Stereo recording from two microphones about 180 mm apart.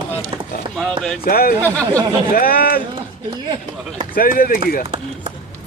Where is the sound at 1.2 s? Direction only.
55° left (ahead or behind).